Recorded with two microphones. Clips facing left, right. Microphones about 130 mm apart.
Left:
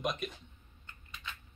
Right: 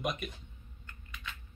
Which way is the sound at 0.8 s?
25° left (ahead or behind).